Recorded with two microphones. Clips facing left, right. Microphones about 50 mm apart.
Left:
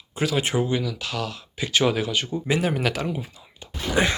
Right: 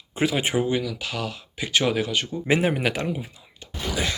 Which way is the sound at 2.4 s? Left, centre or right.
Right.